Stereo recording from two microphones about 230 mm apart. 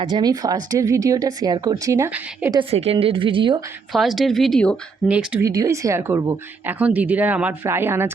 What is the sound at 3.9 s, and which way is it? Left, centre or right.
Speech, centre.